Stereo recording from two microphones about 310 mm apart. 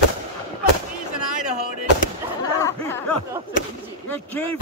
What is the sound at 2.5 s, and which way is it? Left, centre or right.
Speech, centre.